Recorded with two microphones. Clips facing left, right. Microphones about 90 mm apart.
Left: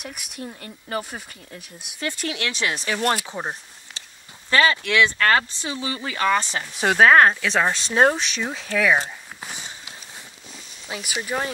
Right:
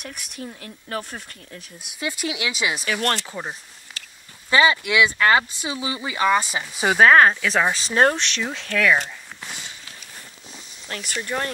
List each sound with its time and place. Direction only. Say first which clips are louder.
0.0 s speech: even; 5° left (ahead or behind)
4.0 s a sound: right 2 dB; 25° left (ahead or behind)
4.5 s speech: right 1 dB; 15° right (ahead or behind); by 11.5 s 5° left (ahead or behind)